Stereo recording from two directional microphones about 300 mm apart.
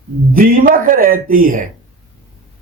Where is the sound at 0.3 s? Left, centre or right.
Right.